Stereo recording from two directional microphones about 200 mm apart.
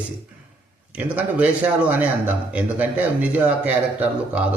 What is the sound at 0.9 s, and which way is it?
Speech, 5° right (ahead or behind).